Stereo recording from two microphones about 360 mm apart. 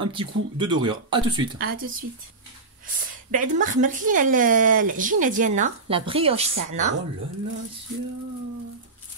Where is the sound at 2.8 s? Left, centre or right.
Right.